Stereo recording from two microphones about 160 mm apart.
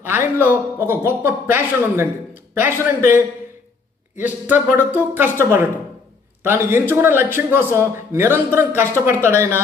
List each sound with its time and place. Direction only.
0.0 s a man's voice: 15° right (ahead or behind)